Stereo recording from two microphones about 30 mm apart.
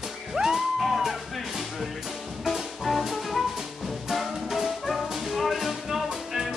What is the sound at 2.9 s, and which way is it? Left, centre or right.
Music, centre.